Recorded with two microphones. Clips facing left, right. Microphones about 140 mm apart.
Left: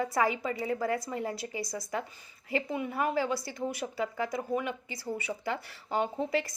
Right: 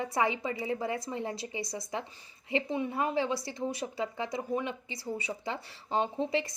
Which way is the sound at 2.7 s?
25° right (ahead or behind).